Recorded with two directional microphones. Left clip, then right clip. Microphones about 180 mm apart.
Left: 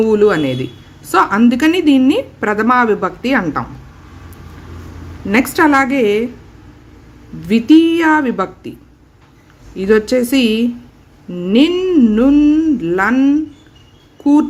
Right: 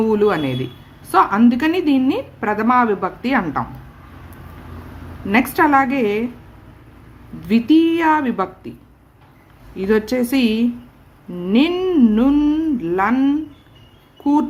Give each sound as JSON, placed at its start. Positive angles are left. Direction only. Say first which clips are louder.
{"t": 0.0, "sound": "speech", "louder": "left 5 dB", "side_deg": 10}
{"t": 5.3, "sound": "speech", "louder": "left 3 dB", "side_deg": 10}
{"t": 7.4, "sound": "speech", "louder": "left 5 dB", "side_deg": 10}
{"t": 9.7, "sound": "speech", "louder": "left 5 dB", "side_deg": 10}